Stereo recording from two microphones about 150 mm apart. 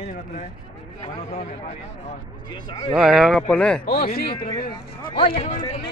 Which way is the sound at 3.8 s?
90° left.